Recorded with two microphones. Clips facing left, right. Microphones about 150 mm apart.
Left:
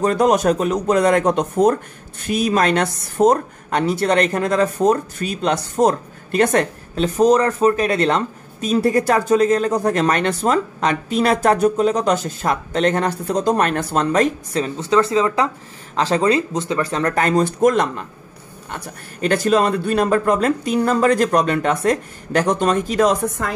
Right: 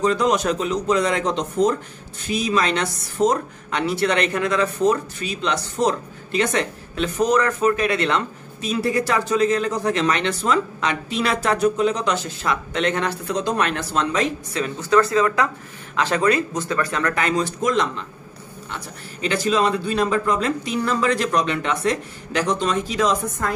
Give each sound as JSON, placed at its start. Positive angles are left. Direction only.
{"t": 0.0, "sound": "speech", "side_deg": 50}
{"t": 14.6, "sound": "speech", "side_deg": 25}
{"t": 19.2, "sound": "speech", "side_deg": 50}